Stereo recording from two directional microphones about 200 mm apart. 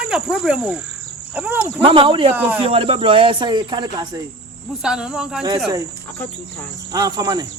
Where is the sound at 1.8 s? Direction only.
25° right (ahead or behind).